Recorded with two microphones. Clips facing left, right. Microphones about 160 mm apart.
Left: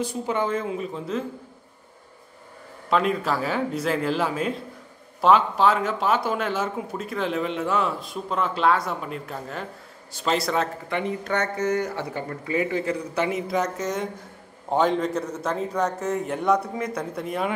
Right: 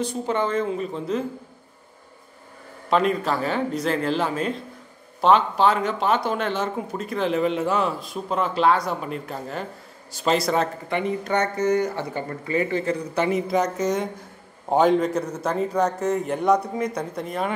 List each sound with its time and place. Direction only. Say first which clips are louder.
0.0 s speech: right 1 dB; 10° left (ahead or behind)
2.9 s speech: right 2 dB; centre (ahead or behind)